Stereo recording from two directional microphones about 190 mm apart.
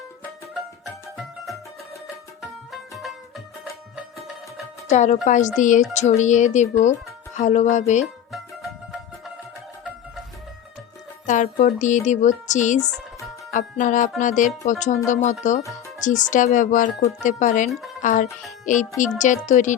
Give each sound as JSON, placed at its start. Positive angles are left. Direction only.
{"t": 2.4, "sound": "music", "side_deg": 0}
{"t": 4.9, "sound": "speech", "side_deg": 40}
{"t": 11.3, "sound": "music", "side_deg": 40}
{"t": 11.6, "sound": "a child's voice", "side_deg": 40}